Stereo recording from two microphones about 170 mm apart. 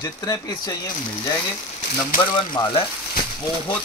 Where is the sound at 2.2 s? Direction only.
25° left (ahead or behind).